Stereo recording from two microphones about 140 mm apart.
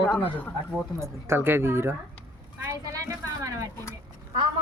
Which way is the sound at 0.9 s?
20° right (ahead or behind).